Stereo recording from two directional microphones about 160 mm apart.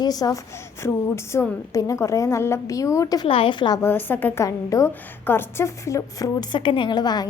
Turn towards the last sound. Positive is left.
turn(degrees=25)  # may be behind; listen again after turning